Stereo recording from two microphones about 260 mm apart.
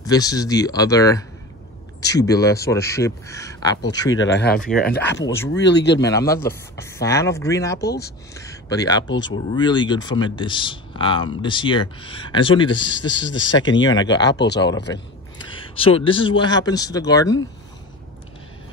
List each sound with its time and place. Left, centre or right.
0.0 s speech: centre
4.2 s speech: left
4.6 s speech: centre
5.5 s speech: left
6.0 s speech: centre
7.8 s speech: left
8.4 s speech: centre
13.4 s speech: left
13.8 s speech: centre
15.5 s speech: left